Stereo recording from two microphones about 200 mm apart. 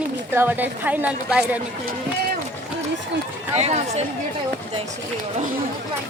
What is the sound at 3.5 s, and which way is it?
Speech, 35° right (ahead or behind).